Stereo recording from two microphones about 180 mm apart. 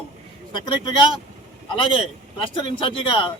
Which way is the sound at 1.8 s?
30° left (ahead or behind).